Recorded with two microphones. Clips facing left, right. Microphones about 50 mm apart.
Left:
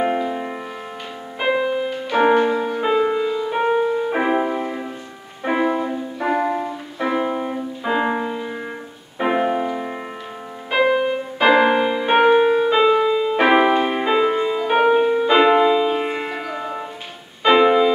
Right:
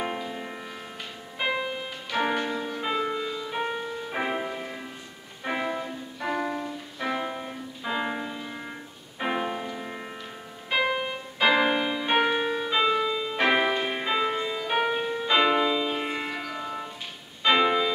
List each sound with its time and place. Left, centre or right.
0.0 s music: left
2.1 s music: left
5.9 s music: left
7.0 s music: left